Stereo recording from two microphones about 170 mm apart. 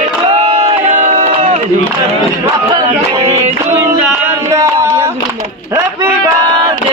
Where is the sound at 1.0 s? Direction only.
40° right (ahead or behind).